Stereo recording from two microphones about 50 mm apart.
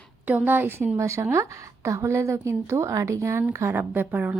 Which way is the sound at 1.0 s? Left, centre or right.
Right.